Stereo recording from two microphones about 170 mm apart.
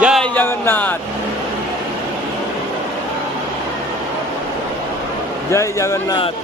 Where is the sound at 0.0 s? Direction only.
Centre (ahead or behind).